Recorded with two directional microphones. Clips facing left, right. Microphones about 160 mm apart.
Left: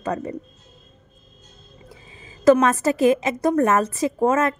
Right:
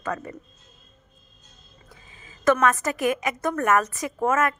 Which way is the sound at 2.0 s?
25° left (ahead or behind).